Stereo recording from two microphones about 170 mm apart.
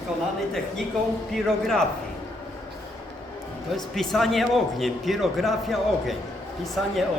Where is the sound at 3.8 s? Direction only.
Centre (ahead or behind).